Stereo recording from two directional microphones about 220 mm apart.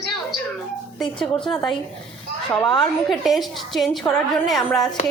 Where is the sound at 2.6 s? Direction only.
20° left (ahead or behind).